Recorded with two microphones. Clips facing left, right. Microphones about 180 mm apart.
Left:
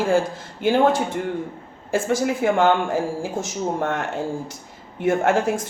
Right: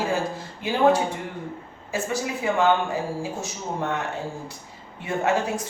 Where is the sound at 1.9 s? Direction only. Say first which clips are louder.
Left 6 dB; 90° left.